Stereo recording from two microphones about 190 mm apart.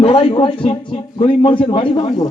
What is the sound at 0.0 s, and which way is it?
Speech, 30° left (ahead or behind).